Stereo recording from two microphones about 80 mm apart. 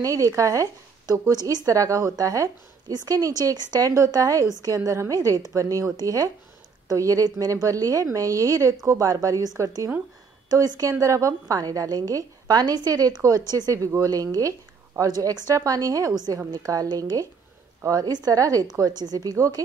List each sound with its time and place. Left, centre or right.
0.0 s a woman's voice: right
1.3 s a woman's voice: right
10.5 s a woman's voice: right
19.3 s a woman's voice: right